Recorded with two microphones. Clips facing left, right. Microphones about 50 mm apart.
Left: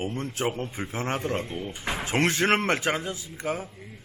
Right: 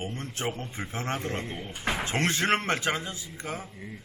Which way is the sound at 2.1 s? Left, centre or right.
Left.